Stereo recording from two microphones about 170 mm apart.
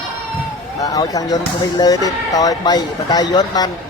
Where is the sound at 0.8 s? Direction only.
20° left (ahead or behind).